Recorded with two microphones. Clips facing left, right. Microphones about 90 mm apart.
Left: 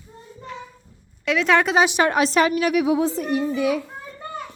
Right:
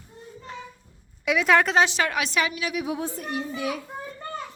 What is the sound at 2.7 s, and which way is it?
Speech, 90° left.